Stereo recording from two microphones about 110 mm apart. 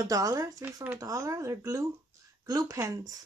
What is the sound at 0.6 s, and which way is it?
Speech, 15° right (ahead or behind).